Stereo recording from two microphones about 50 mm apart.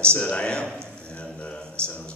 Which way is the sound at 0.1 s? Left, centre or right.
Centre.